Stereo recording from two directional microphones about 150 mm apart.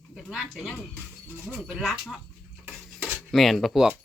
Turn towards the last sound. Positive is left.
turn(degrees=0)  # may be behind; listen again after turning